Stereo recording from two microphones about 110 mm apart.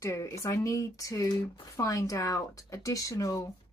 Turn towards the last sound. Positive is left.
turn(degrees=30)  # may be behind; listen again after turning